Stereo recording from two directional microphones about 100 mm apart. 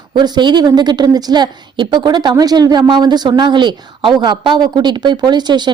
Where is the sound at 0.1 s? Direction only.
50° right (ahead or behind).